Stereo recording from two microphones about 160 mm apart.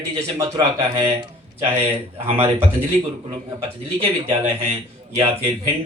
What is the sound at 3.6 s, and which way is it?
A man's voice, 40° right (ahead or behind).